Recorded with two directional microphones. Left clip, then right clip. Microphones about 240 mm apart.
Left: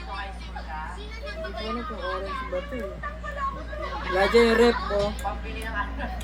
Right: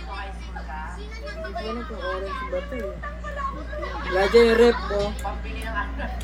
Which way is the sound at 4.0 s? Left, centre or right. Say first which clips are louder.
Right 3 dB; left.